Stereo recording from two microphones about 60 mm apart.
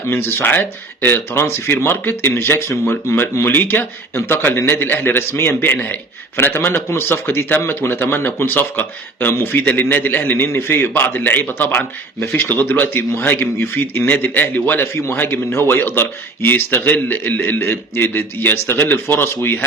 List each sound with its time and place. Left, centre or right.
0.1 s speech: left
14.0 s speech: left